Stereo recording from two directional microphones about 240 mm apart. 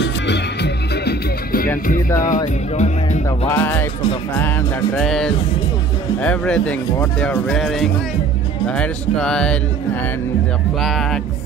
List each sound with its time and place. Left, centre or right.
0.0 s music: left
3.3 s music: centre
4.9 s speech: centre
10.8 s speech: centre